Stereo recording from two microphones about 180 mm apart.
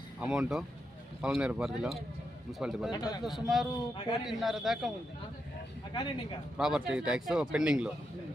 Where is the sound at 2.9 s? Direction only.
20° left (ahead or behind).